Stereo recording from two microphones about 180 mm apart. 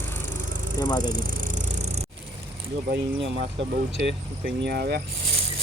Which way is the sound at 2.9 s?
80° right.